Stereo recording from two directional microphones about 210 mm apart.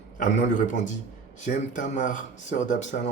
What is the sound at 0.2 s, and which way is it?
Speech, 35° left (ahead or behind).